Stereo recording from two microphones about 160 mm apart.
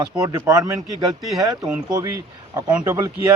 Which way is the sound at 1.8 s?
25° right (ahead or behind).